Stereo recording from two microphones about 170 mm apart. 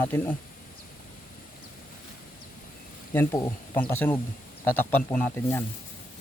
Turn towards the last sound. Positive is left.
turn(degrees=10)  # may be behind; listen again after turning